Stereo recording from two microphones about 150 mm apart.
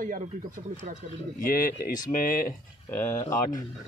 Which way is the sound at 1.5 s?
75° left (ahead or behind).